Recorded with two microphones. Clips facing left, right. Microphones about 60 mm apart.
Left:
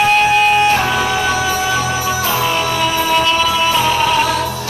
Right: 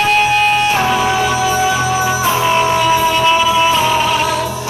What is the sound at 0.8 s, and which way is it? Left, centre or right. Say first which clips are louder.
Music: right 2 dB; right.